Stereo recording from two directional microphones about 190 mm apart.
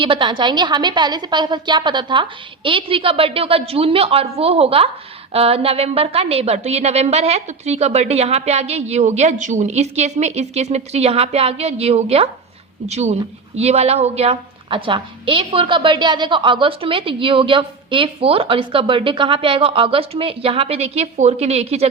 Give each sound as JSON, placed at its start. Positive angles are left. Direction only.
{"t": 0.0, "sound": "a woman's voice", "side_deg": -25}